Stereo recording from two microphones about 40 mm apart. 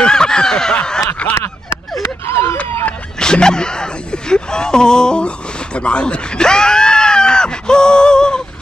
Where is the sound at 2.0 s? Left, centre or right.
Left.